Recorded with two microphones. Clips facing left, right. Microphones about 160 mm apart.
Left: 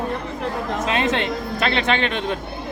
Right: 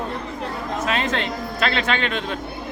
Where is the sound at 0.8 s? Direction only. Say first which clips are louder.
Left 2 dB; 20° left (ahead or behind).